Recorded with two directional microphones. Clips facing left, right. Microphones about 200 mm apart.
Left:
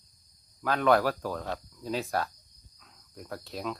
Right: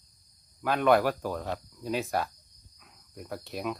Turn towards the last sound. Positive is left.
turn(degrees=-10)  # may be behind; listen again after turning